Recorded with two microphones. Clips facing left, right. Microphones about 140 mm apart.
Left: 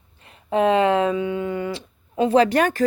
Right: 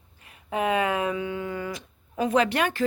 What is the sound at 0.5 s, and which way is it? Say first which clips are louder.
Speech: left 7 dB; 25° left (ahead or behind).